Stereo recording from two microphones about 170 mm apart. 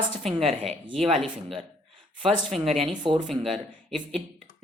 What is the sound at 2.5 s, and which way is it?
Speech, 45° right (ahead or behind).